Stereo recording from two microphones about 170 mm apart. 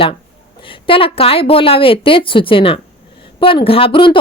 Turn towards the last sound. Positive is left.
turn(degrees=30)  # may be behind; listen again after turning